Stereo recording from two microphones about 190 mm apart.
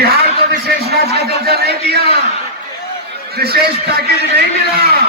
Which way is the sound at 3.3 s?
55° right (ahead or behind).